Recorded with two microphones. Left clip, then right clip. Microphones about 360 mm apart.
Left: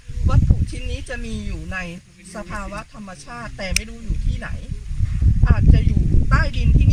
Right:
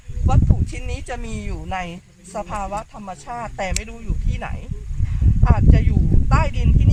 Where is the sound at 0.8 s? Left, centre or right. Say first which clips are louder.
Even; centre.